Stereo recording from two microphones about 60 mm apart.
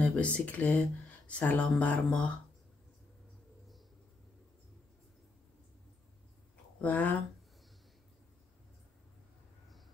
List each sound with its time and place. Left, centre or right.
0.0 s speech: left
6.8 s speech: left